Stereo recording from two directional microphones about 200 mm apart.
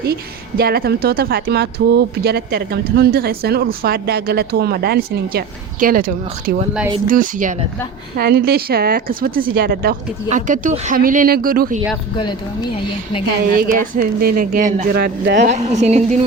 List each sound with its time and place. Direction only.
0.0 s a woman's voice: 50° right (ahead or behind)
12.1 s speech: 20° left (ahead or behind)
13.6 s a woman's voice: 45° right (ahead or behind)